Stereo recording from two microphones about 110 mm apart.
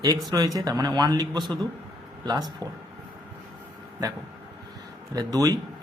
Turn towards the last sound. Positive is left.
turn(degrees=-35)  # may be behind; listen again after turning